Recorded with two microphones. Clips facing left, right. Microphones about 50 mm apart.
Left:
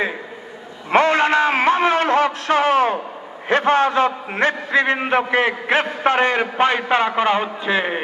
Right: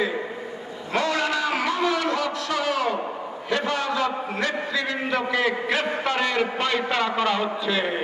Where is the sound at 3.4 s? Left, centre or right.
Left.